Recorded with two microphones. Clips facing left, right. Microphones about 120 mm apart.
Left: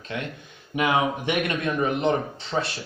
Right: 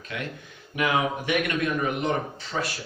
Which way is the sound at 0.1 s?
25° left (ahead or behind).